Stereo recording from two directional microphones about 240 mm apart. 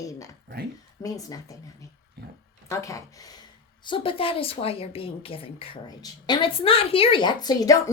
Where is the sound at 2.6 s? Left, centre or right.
Centre.